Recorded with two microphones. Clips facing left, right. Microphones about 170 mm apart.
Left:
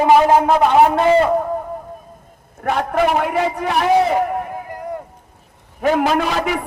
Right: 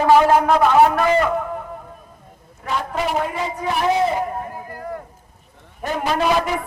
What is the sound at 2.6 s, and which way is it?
A man's voice, 60° left (ahead or behind).